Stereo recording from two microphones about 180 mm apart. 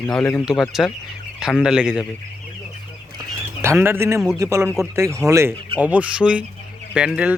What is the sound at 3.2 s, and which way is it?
Bird, 15° right (ahead or behind).